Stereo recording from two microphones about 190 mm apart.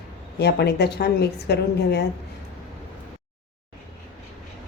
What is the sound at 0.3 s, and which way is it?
A woman's voice, 60° left (ahead or behind).